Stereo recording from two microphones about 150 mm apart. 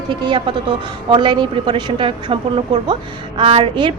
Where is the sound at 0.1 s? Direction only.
30° right (ahead or behind).